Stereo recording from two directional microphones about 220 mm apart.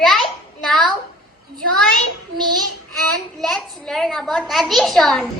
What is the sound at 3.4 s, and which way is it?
A child's voice, centre (ahead or behind).